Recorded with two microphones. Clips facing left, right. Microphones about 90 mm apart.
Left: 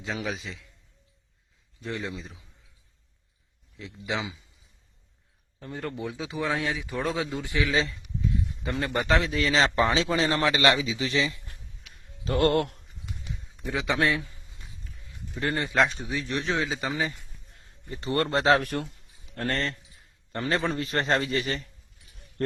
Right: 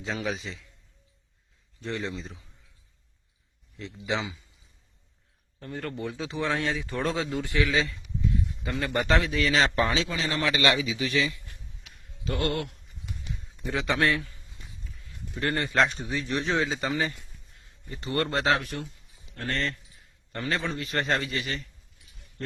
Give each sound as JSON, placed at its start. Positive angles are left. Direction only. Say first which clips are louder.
{"t": 0.0, "sound": "speech", "louder": "right 1 dB", "side_deg": 0}
{"t": 1.8, "sound": "speech", "louder": "right 1 dB", "side_deg": 5}
{"t": 3.8, "sound": "speech", "louder": "right 1 dB", "side_deg": 5}
{"t": 5.5, "sound": "speech", "louder": "even", "side_deg": 15}
{"t": 7.7, "sound": "speech", "louder": "left 1 dB", "side_deg": 30}
{"t": 8.9, "sound": "speech", "louder": "even", "side_deg": 15}
{"t": 9.2, "sound": "a man's voice", "louder": "even", "side_deg": 30}
{"t": 12.2, "sound": "a man's voice", "louder": "left 6 dB", "side_deg": 40}
{"t": 13.4, "sound": "a man's voice", "louder": "even", "side_deg": 5}
{"t": 15.4, "sound": "speech", "louder": "even", "side_deg": 15}
{"t": 16.0, "sound": "speech", "louder": "right 1 dB", "side_deg": 0}
{"t": 17.5, "sound": "a man's voice", "louder": "left 3 dB", "side_deg": 40}
{"t": 18.6, "sound": "speech", "louder": "left 5 dB", "side_deg": 55}
{"t": 19.4, "sound": "a man's voice", "louder": "left 2 dB", "side_deg": 40}